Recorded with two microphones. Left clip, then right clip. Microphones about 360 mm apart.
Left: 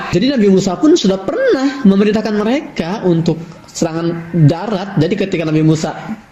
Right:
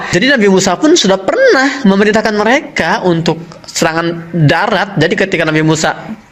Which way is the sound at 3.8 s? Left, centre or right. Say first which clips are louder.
Right 5 dB; right.